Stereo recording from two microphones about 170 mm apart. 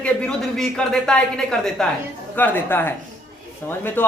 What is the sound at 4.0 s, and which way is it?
Speech, 10° left (ahead or behind).